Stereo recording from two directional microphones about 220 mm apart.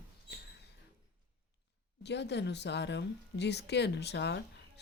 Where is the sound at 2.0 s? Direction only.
50° left (ahead or behind).